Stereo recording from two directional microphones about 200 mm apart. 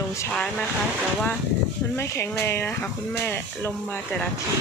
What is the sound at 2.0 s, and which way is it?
Speech, 15° left (ahead or behind).